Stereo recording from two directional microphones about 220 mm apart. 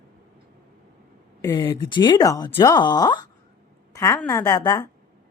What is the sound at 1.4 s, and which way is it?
A woman's voice, 20° left (ahead or behind).